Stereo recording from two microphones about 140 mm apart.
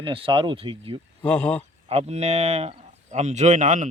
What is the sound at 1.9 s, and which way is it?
Speech, 50° right (ahead or behind).